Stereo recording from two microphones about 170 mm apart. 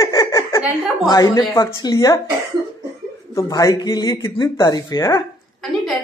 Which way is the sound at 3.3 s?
20° left (ahead or behind).